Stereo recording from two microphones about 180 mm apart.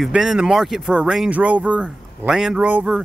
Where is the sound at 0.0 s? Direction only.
5° right (ahead or behind).